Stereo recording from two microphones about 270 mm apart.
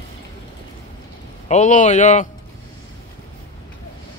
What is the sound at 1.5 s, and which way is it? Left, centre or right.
Speech, left.